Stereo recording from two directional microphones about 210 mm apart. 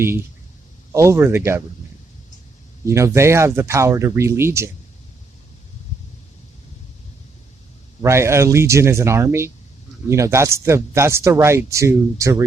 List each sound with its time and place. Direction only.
0.9 s speech: 15° right (ahead or behind)
2.8 s speech: 15° right (ahead or behind)
8.0 s speech: 15° right (ahead or behind)